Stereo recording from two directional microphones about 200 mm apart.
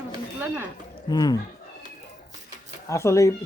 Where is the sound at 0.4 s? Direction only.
10° right (ahead or behind).